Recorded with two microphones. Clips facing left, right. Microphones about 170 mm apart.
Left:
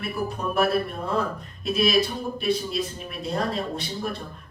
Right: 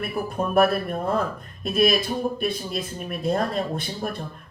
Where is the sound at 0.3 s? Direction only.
50° right (ahead or behind).